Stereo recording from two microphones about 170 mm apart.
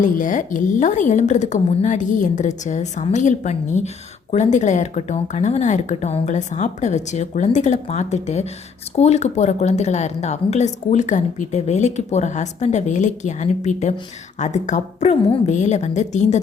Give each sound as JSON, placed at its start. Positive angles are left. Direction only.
{"t": 0.0, "sound": "a woman's voice", "side_deg": 50}